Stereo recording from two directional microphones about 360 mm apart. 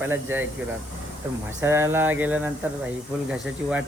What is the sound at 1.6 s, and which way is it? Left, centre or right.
Speech, centre.